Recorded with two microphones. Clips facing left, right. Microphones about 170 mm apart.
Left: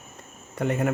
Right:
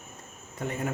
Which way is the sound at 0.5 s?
70° left (ahead or behind).